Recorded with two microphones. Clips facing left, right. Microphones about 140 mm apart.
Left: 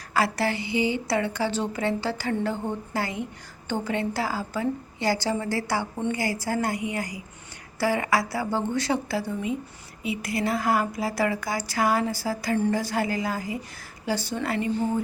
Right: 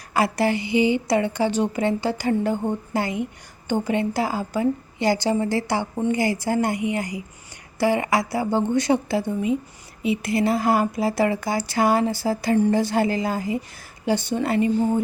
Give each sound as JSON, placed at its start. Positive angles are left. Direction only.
{"t": 0.1, "sound": "a woman's voice", "side_deg": -20}